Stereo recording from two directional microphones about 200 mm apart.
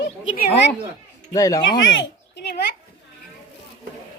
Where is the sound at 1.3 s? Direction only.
15° left (ahead or behind).